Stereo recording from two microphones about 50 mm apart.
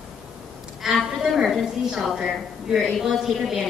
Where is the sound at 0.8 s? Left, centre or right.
Centre.